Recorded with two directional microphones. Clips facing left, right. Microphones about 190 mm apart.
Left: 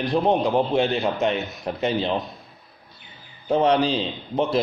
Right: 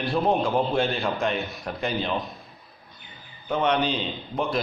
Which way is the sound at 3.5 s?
30° left (ahead or behind).